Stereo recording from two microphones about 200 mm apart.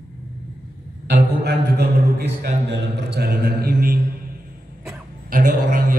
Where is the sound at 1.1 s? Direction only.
55° right (ahead or behind).